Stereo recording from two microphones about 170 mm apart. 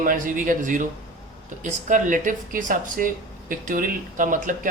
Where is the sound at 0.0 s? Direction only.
50° right (ahead or behind).